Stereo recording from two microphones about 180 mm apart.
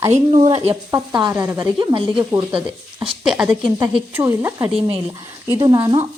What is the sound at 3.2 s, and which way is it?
Speech, 5° right (ahead or behind).